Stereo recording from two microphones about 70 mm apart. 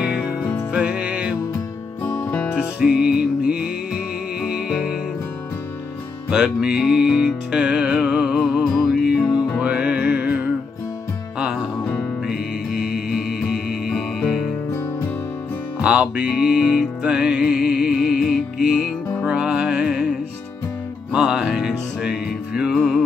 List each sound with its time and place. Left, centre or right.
0.0 s music: centre
2.5 s music: centre
6.3 s music: centre
8.6 s music: centre
9.0 s music: centre
11.8 s music: left
12.3 s music: centre
15.8 s music: centre